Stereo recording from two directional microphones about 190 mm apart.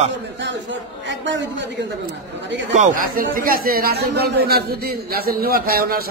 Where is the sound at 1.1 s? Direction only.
70° right (ahead or behind).